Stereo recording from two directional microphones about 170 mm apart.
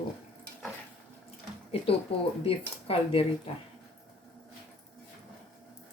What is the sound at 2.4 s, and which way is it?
Speech, 35° left (ahead or behind).